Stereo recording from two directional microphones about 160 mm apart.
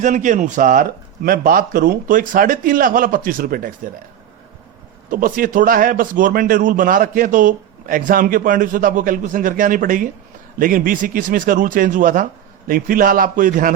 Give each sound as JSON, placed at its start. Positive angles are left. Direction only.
{"t": 0.0, "sound": "speech", "side_deg": -50}
{"t": 5.1, "sound": "speech", "side_deg": -60}